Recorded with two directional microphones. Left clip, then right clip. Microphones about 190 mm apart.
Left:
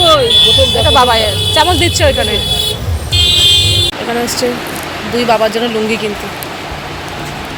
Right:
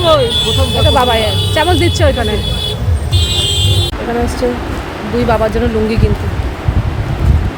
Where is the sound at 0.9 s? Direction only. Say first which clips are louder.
Left 2 dB; 15° right (ahead or behind).